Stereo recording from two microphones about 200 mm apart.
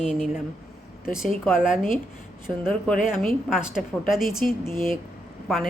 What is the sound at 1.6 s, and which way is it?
Speech, 40° left (ahead or behind).